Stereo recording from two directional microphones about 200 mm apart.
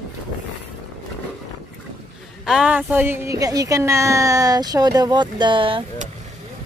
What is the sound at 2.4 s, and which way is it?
A woman's voice, 5° right (ahead or behind).